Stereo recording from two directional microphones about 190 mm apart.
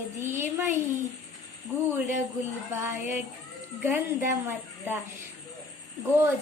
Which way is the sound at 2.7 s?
15° right (ahead or behind).